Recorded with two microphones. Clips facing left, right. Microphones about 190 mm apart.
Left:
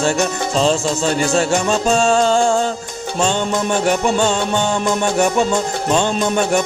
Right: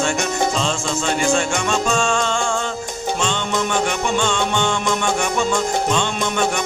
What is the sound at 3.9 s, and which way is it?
Music, 40° left (ahead or behind).